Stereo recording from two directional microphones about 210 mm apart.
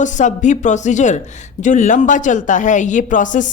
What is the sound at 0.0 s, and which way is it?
Speech, 35° left (ahead or behind).